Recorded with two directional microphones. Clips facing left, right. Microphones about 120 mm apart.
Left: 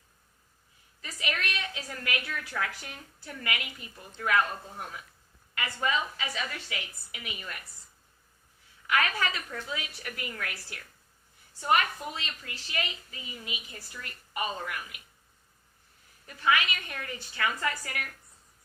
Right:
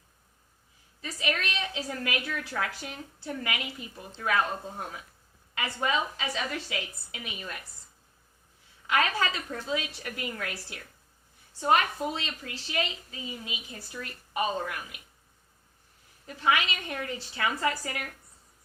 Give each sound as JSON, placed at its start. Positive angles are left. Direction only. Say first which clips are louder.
{"t": 1.0, "sound": "a woman's voice", "louder": "right 3 dB", "side_deg": -30}
{"t": 8.9, "sound": "a woman's voice", "louder": "right 2 dB", "side_deg": -25}
{"t": 16.2, "sound": "a woman's voice", "louder": "right 1 dB", "side_deg": -25}